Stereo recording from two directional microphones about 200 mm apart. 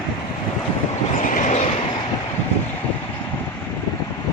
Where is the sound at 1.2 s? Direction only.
40° left (ahead or behind).